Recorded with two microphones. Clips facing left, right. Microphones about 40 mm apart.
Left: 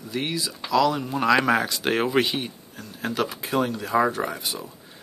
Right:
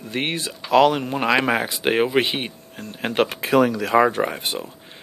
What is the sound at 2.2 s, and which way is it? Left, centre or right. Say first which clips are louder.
Speech: right 2 dB; right.